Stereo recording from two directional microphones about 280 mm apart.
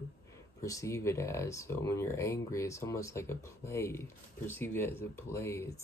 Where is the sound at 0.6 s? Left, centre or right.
Centre.